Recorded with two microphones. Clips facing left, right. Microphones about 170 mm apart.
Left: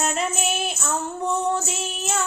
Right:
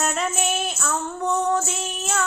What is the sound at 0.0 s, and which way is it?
Child singing, centre (ahead or behind).